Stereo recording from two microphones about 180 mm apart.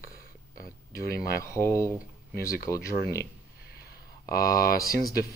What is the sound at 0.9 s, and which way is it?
Speech, 15° left (ahead or behind).